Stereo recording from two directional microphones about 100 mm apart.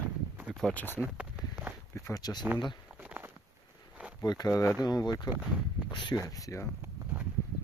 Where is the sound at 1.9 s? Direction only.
35° left (ahead or behind).